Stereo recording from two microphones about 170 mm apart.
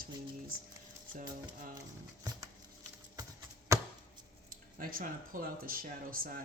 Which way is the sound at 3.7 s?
20° right (ahead or behind).